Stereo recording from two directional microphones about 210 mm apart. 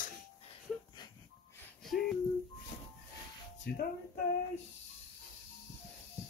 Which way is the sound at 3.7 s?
50° left (ahead or behind).